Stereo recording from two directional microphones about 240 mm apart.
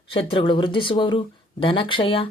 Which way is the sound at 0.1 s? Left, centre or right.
Left.